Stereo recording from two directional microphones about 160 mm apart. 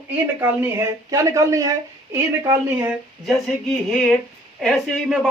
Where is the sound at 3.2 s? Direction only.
5° left (ahead or behind).